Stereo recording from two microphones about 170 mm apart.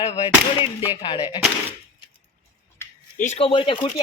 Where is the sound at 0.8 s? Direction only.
25° left (ahead or behind).